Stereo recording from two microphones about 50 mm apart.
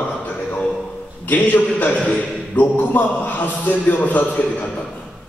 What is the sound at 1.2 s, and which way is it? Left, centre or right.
Speech, left.